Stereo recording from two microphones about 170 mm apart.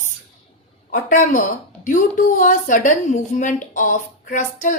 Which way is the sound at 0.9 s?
50° left (ahead or behind).